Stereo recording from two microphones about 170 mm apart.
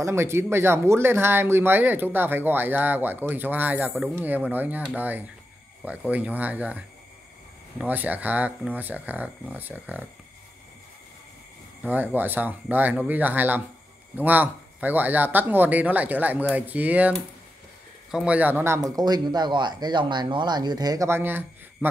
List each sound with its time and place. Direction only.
0.0 s speech: 15° right (ahead or behind)
7.8 s speech: 10° right (ahead or behind)
11.8 s speech: 10° right (ahead or behind)
18.1 s a man's voice: 5° right (ahead or behind)